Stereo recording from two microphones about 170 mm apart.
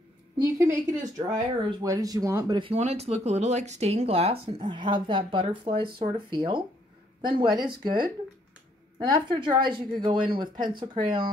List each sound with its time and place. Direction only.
0.4 s speech: 20° right (ahead or behind)
2.7 s speech: 40° right (ahead or behind)